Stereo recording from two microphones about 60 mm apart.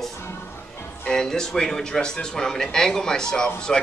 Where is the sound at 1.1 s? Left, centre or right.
Centre.